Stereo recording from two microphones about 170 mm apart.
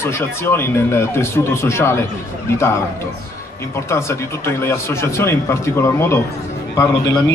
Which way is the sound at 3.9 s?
15° left (ahead or behind).